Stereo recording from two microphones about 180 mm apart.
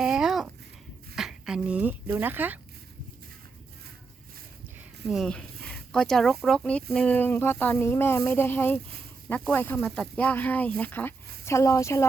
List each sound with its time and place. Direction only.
0.0 s a sound: centre (ahead or behind)
1.1 s speech: 5° right (ahead or behind)
5.0 s speech: centre (ahead or behind)